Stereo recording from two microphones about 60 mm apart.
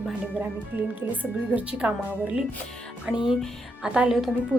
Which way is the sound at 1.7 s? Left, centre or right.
Centre.